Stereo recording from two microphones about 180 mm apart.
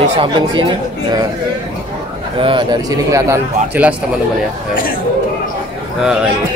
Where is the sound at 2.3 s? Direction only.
30° right (ahead or behind); by 3.9 s 15° right (ahead or behind).